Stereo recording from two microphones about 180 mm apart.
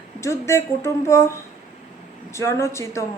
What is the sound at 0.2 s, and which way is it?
Speech, 15° left (ahead or behind).